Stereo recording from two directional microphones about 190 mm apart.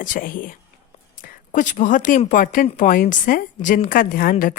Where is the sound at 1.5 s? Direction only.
40° left (ahead or behind).